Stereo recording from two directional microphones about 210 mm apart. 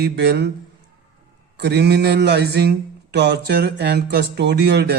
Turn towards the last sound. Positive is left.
turn(degrees=-50)  # may be behind; listen again after turning